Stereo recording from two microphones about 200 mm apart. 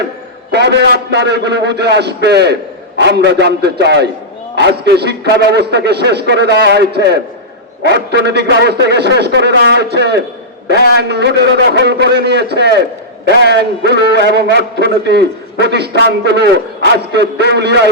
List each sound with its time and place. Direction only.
0.5 s a man's voice: 55° right (ahead or behind)